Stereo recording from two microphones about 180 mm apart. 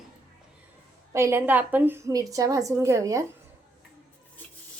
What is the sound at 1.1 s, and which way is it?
A woman's voice, 15° right (ahead or behind).